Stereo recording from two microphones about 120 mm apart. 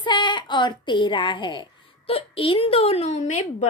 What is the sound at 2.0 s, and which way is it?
A woman's voice, 50° left (ahead or behind).